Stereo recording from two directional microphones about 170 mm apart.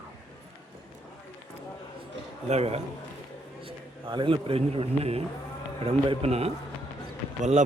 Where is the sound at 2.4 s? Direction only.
40° right (ahead or behind).